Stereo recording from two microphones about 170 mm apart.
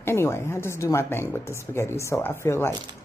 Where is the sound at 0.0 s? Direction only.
15° left (ahead or behind).